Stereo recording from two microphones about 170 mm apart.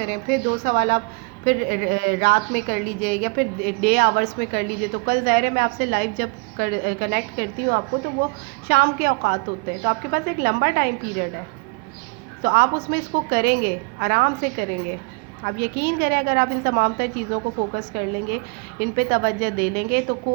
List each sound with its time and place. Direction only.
0.0 s a woman's voice: 55° right (ahead or behind)
12.4 s a woman's voice: 65° right (ahead or behind)